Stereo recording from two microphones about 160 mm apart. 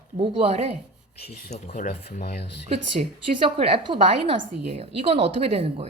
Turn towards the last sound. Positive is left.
turn(degrees=-40)  # may be behind; listen again after turning